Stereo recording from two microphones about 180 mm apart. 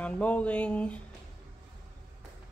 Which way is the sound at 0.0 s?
5° left (ahead or behind).